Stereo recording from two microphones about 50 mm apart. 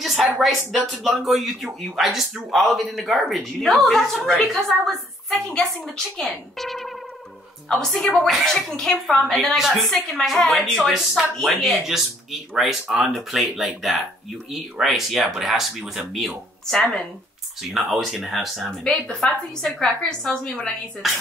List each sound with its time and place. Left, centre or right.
0.0 s a sound: centre
0.4 s speech: centre
5.9 s speech: centre
8.1 s a woman's voice: centre; by 20.7 s left
21.0 s speech: centre